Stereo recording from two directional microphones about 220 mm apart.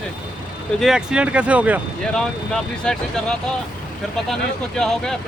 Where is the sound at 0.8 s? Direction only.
Centre (ahead or behind).